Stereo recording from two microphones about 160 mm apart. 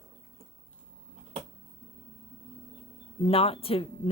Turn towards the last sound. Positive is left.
turn(degrees=35)  # may be behind; listen again after turning